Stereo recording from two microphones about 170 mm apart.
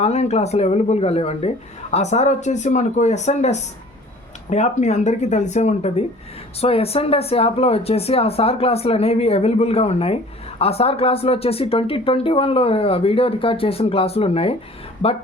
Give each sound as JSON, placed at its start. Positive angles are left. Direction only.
{"t": 0.0, "sound": "speech", "side_deg": 40}